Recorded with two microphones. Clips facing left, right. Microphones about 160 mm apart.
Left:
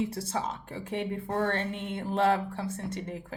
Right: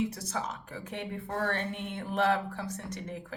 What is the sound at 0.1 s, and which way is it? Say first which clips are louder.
Speech: left 3 dB; 25° left (ahead or behind).